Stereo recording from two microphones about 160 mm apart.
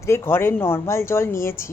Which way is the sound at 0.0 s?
15° left (ahead or behind).